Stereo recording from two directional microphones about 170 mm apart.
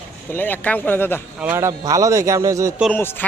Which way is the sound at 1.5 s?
20° right (ahead or behind).